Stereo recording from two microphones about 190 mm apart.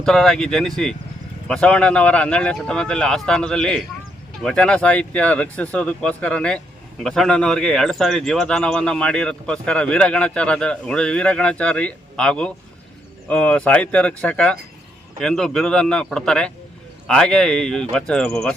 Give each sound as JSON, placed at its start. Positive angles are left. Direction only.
{"t": 0.0, "sound": "speech", "side_deg": 5}